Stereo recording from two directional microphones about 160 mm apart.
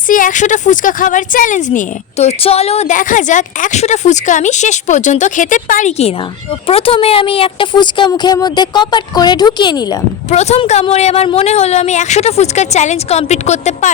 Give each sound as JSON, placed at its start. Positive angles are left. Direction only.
{"t": 0.1, "sound": "a woman's voice", "side_deg": 55}
{"t": 10.2, "sound": "a woman's voice", "side_deg": 45}